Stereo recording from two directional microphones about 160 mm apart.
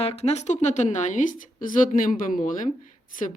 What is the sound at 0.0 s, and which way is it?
A woman's voice, 40° left (ahead or behind).